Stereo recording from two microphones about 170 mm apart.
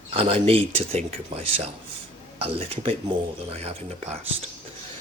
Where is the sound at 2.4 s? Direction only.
35° right (ahead or behind).